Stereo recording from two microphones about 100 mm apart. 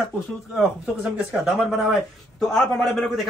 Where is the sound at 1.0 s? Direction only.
Centre (ahead or behind).